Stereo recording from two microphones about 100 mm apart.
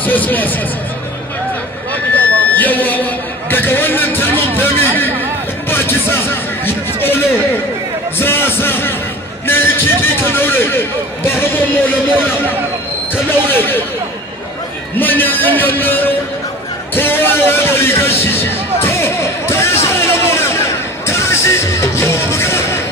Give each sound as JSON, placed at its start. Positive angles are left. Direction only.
{"t": 0.0, "sound": "speech", "side_deg": 15}
{"t": 2.1, "sound": "a sound", "side_deg": 15}
{"t": 8.2, "sound": "speech", "side_deg": 20}
{"t": 13.1, "sound": "speech", "side_deg": 20}
{"t": 15.0, "sound": "speech", "side_deg": 20}
{"t": 16.9, "sound": "music", "side_deg": 20}